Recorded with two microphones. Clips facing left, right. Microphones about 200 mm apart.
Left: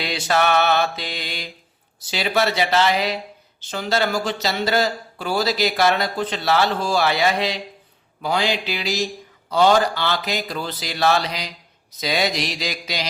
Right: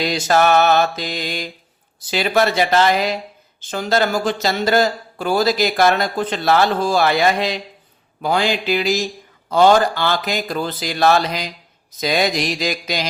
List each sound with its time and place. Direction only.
0.0 s speech: 40° right (ahead or behind)